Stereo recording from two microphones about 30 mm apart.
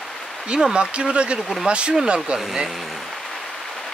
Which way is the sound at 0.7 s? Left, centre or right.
Right.